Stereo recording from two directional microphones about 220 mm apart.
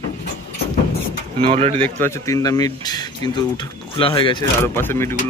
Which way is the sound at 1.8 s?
10° left (ahead or behind).